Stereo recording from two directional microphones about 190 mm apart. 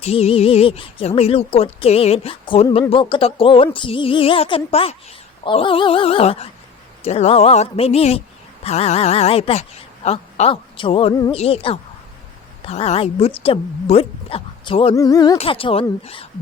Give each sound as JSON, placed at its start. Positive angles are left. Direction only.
{"t": 0.0, "sound": "a woman's voice", "side_deg": 30}